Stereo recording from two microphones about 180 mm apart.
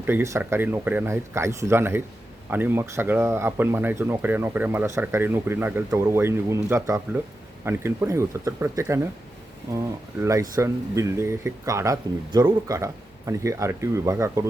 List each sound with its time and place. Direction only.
0.0 s speech: 15° right (ahead or behind)